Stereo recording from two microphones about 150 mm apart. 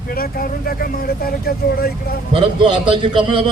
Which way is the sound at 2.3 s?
35° right (ahead or behind).